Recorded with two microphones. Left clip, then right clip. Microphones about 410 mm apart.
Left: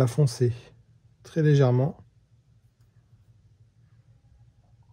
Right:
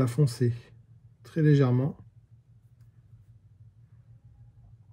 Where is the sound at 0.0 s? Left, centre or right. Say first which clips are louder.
Left 3 dB; centre.